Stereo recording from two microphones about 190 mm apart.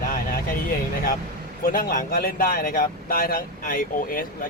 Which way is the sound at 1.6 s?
45° left (ahead or behind).